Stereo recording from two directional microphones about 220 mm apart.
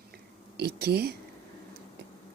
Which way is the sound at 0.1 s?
45° right (ahead or behind).